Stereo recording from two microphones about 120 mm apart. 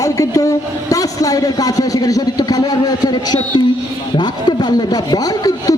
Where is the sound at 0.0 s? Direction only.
30° left (ahead or behind).